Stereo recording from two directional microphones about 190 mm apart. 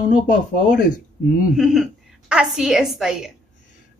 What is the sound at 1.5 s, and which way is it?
A woman's voice, centre (ahead or behind).